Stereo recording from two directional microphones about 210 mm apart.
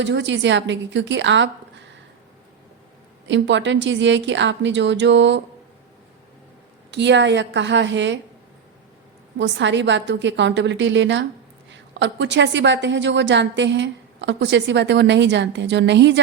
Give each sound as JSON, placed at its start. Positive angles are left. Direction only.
{"t": 0.0, "sound": "a woman's voice", "side_deg": -60}
{"t": 3.2, "sound": "a woman's voice", "side_deg": -60}
{"t": 6.9, "sound": "a woman's voice", "side_deg": -55}
{"t": 9.4, "sound": "a woman's voice", "side_deg": -60}